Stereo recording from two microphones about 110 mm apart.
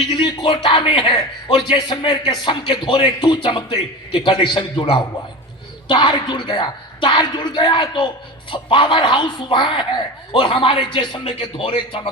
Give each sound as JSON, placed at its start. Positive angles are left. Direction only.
{"t": 0.1, "sound": "a man's voice", "side_deg": 45}